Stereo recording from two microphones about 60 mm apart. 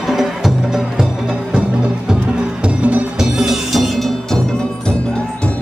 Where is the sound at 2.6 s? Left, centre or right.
Right.